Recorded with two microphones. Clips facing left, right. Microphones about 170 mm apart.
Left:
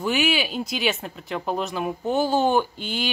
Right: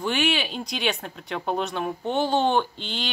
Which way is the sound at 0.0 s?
5° left (ahead or behind).